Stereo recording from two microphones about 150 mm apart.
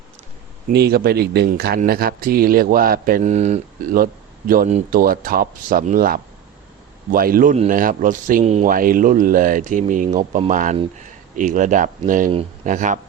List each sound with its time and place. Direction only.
0.7 s a man's voice: 90° right
3.2 s speech: 50° right (ahead or behind)
3.9 s a man's voice: 75° right (ahead or behind); by 13.0 s 55° right (ahead or behind)